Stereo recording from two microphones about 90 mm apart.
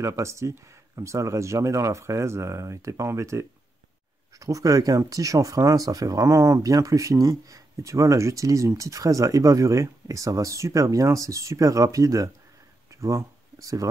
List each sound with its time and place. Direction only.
0.0 s speech: 35° right (ahead or behind)